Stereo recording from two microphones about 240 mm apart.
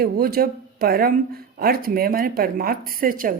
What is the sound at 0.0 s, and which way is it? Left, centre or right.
Speech, right.